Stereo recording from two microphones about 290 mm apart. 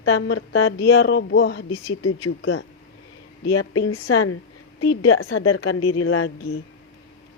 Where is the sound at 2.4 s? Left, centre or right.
Left.